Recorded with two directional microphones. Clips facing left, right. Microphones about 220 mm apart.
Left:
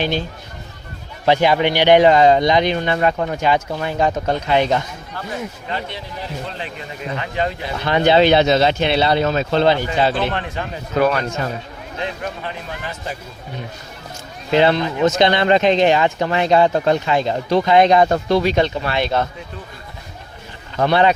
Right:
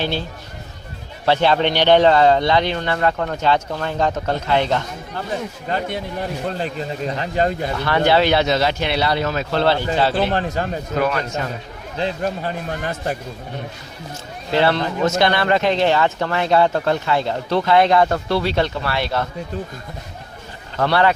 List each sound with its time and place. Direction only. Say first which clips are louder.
0.0 s speech: left 2 dB; 15° left (ahead or behind)
5.6 s a man's voice: right 4 dB; 45° right (ahead or behind)
6.7 s a man's voice: right 3 dB; 35° right (ahead or behind)
7.9 s speech: left 3 dB; 20° left (ahead or behind)
10.3 s a man's voice: right 4 dB; 40° right (ahead or behind)
11.9 s a man's voice: right 4 dB; 35° right (ahead or behind); by 13.1 s 50° right (ahead or behind)
14.5 s speech: left 3 dB; 20° left (ahead or behind)
20.7 s speech: left 2 dB; 15° left (ahead or behind)